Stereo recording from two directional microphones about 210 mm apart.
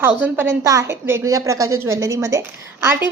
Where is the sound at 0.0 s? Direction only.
10° right (ahead or behind).